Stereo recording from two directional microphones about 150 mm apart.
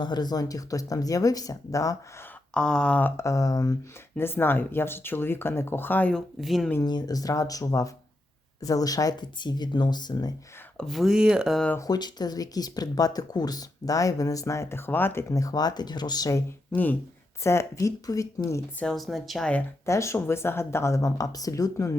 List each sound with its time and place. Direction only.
0.0 s speech: 30° left (ahead or behind)
2.5 s speech: 5° left (ahead or behind)
6.8 s speech: 25° left (ahead or behind)
10.8 s speech: centre (ahead or behind)
11.7 s speech: 25° left (ahead or behind)
16.7 s speech: 10° left (ahead or behind)
18.8 s speech: centre (ahead or behind)
19.8 s speech: 20° left (ahead or behind)